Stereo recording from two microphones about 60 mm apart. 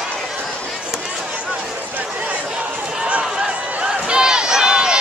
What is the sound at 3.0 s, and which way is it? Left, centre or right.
Crowd, centre.